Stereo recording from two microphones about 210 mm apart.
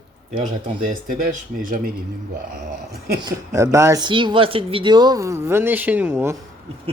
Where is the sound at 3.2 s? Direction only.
15° right (ahead or behind).